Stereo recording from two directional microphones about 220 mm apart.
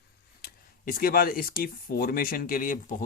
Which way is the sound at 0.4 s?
40° left (ahead or behind).